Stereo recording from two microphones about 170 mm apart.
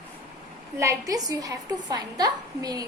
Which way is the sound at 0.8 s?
20° right (ahead or behind).